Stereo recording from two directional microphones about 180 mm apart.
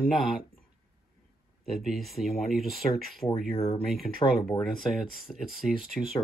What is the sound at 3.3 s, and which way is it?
Speech, 20° left (ahead or behind).